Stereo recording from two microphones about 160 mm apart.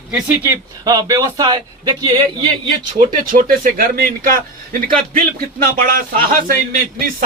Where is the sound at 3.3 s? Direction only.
60° right (ahead or behind).